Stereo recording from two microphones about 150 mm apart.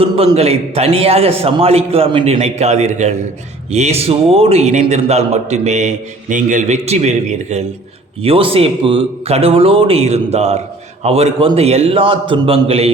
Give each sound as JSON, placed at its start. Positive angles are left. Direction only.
{"t": 0.0, "sound": "a man's voice", "side_deg": -40}